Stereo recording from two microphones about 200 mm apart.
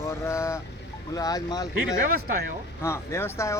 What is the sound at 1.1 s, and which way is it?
Speech, 20° left (ahead or behind).